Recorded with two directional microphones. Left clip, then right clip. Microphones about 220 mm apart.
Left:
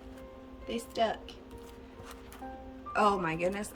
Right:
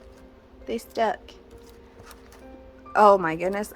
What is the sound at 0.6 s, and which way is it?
Speech, 15° right (ahead or behind).